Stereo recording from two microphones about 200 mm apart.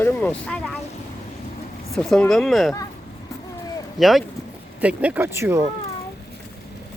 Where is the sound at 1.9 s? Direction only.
5° left (ahead or behind).